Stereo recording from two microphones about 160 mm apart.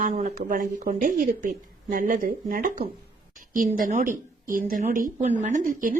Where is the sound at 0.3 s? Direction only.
60° right (ahead or behind).